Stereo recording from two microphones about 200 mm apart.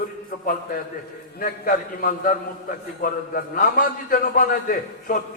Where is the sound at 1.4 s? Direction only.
45° left (ahead or behind).